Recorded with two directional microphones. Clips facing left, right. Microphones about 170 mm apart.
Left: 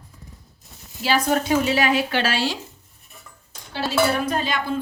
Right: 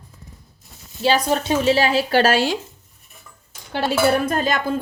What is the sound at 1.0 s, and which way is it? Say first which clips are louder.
Speech: right 2 dB; 25° right (ahead or behind).